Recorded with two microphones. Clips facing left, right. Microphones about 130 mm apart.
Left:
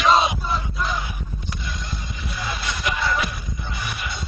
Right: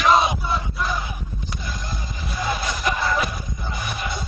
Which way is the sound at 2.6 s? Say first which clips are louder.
Right 2 dB; 35° right (ahead or behind).